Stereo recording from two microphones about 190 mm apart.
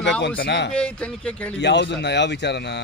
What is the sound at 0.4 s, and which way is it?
Speech, 65° left (ahead or behind).